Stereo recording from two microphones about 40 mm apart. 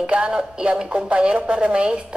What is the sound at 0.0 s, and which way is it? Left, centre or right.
A woman's voice, right.